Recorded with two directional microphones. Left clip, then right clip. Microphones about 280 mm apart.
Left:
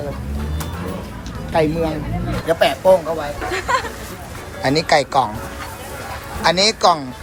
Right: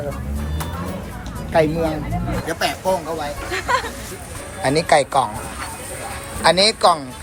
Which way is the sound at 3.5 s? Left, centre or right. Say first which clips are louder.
Left 1 dB; centre.